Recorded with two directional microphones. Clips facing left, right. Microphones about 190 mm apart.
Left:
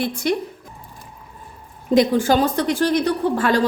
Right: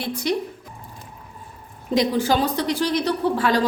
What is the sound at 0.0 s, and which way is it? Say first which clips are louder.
Speech: left 3 dB; 50° left (ahead or behind).